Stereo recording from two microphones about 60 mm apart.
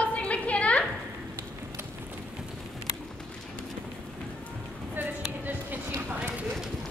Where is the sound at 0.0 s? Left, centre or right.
Left.